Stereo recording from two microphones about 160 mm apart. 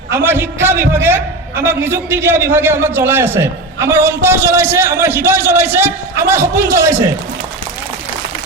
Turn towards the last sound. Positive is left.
turn(degrees=-15)  # may be behind; listen again after turning